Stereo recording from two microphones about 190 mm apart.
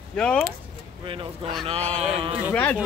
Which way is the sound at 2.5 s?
5° left (ahead or behind).